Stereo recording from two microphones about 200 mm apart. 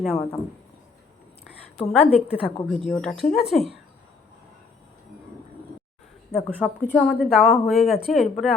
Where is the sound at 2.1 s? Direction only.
30° left (ahead or behind).